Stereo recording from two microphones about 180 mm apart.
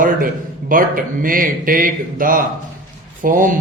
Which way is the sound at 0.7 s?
50° right (ahead or behind).